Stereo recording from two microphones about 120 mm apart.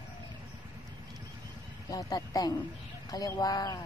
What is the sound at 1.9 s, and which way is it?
A woman's voice, 30° left (ahead or behind).